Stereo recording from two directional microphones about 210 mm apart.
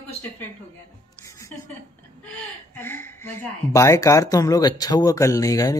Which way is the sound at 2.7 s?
10° left (ahead or behind).